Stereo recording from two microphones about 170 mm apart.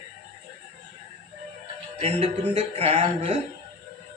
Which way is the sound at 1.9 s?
35° right (ahead or behind).